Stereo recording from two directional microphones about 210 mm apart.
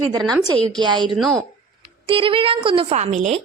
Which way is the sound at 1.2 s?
Centre (ahead or behind).